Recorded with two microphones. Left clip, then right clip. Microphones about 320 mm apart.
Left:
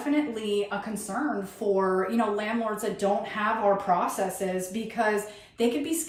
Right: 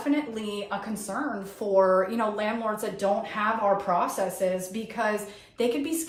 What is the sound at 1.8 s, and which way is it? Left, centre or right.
Speech, centre.